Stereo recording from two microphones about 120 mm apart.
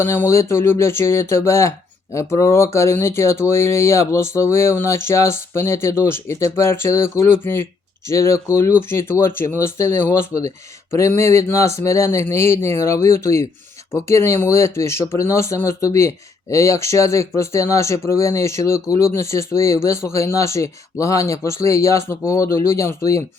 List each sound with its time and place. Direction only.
0.0 s speech: 20° left (ahead or behind)